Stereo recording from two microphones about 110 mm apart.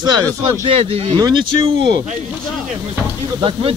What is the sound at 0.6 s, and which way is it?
Speech, 65° right (ahead or behind).